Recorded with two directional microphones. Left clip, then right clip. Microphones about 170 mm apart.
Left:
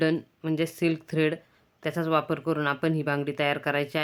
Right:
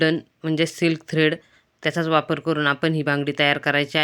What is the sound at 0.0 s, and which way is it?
Speech, 20° right (ahead or behind).